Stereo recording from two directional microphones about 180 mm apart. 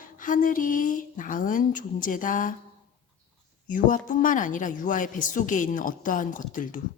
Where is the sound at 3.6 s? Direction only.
45° left (ahead or behind).